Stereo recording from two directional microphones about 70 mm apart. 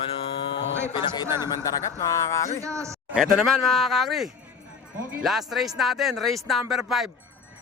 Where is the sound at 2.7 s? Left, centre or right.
Right.